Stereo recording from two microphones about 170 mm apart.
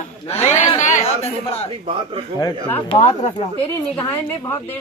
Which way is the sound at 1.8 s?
30° right (ahead or behind).